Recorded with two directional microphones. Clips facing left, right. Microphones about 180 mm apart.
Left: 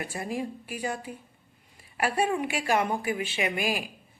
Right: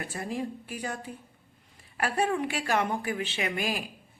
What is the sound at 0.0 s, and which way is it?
A woman's voice, 10° left (ahead or behind).